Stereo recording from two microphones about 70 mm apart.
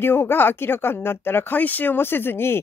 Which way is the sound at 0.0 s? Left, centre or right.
Left.